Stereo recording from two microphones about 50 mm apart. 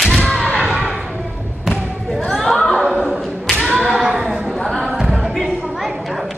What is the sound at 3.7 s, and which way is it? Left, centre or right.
Clapping, centre.